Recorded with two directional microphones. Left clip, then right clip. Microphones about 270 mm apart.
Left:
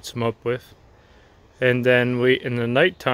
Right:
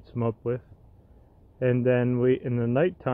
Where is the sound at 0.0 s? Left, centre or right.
Centre.